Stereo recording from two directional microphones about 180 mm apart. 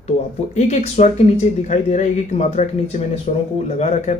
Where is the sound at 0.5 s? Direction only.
40° left (ahead or behind).